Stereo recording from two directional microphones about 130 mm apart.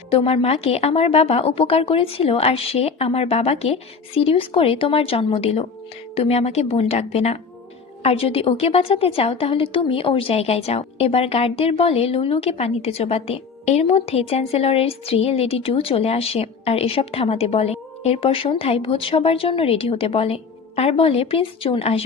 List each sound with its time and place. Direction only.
0.1 s a woman's voice: 50° left (ahead or behind)